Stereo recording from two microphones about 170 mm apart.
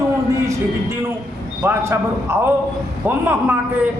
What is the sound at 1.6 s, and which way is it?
A man's voice, 15° right (ahead or behind).